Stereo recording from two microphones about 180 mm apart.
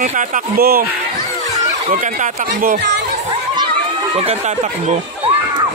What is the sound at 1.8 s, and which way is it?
Speech, 40° right (ahead or behind).